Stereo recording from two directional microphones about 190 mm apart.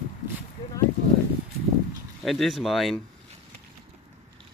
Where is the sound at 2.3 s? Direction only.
Centre (ahead or behind).